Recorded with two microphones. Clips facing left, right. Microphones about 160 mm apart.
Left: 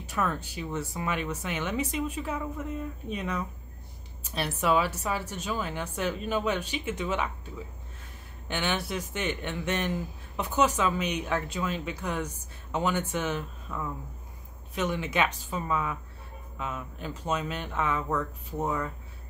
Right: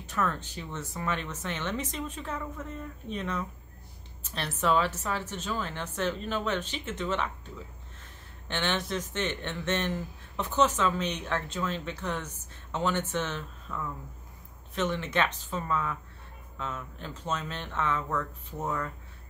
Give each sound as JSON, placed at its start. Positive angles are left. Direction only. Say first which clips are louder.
{"t": 0.0, "sound": "speech", "louder": "left 1 dB", "side_deg": 10}